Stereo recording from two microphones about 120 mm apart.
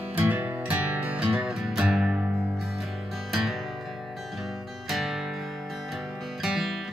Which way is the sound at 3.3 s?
Centre (ahead or behind).